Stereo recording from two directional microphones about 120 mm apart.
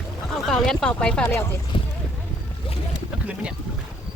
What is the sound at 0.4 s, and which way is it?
Speech, 5° left (ahead or behind).